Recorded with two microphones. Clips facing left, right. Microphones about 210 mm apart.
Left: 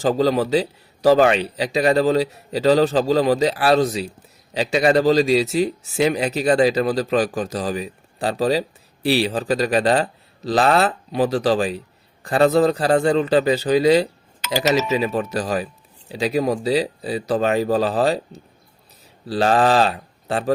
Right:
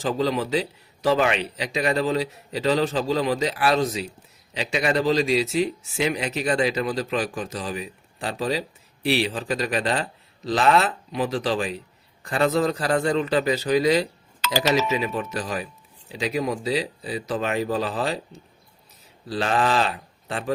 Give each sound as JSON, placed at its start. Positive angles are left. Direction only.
{"t": 0.0, "sound": "a man's voice", "side_deg": 35}